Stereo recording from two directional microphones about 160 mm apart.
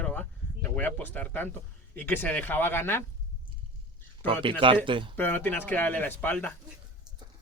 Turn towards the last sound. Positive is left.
turn(degrees=10)  # may be behind; listen again after turning